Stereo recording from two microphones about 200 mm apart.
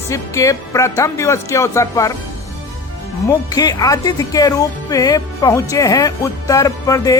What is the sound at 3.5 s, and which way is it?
Speech, 20° left (ahead or behind).